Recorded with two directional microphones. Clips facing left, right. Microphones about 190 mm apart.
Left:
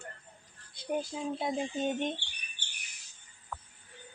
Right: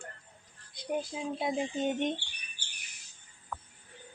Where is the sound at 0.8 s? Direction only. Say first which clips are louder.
Even; 10° right (ahead or behind).